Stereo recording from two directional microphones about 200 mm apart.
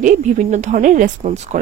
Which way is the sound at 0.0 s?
40° right (ahead or behind).